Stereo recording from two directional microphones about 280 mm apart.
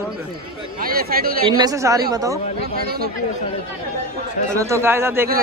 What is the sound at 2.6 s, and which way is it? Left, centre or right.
Speech, right.